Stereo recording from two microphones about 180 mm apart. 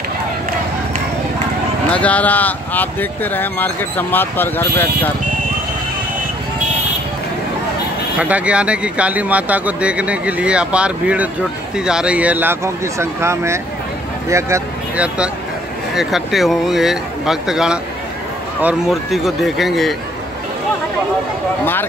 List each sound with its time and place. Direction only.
1.9 s speech: 5° left (ahead or behind)
8.2 s speech: 5° right (ahead or behind)
15.9 s speech: centre (ahead or behind)